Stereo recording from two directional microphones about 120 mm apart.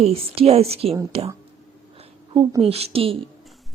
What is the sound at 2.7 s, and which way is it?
Speech, 55° right (ahead or behind).